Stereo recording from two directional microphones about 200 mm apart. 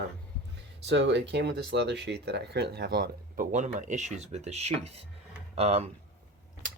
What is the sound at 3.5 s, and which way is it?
Speech, 35° right (ahead or behind).